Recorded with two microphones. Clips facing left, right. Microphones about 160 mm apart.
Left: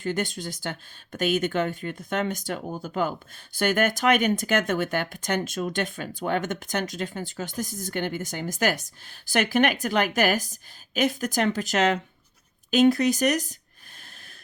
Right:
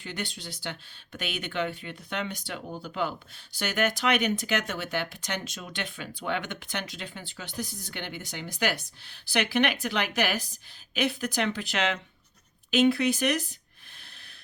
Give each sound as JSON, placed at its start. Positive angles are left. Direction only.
{"t": 0.0, "sound": "speech", "side_deg": 45}